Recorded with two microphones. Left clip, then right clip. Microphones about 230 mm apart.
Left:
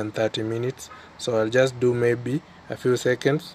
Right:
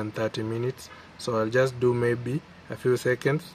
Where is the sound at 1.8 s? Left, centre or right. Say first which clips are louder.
Left 3 dB; centre.